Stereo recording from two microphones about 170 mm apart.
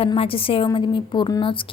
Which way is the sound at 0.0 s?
35° left (ahead or behind).